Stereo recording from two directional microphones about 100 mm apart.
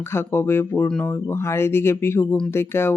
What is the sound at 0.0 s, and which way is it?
Speech, 25° left (ahead or behind).